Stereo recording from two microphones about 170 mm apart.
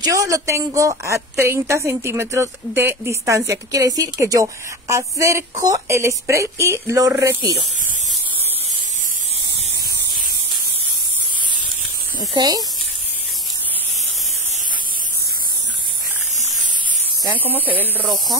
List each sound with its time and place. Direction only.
0.0 s a woman's voice: 20° right (ahead or behind)
12.2 s speech: 20° right (ahead or behind)
17.3 s a woman's voice: 10° right (ahead or behind)